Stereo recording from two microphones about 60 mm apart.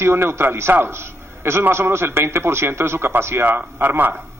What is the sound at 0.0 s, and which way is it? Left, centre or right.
A man's voice, right.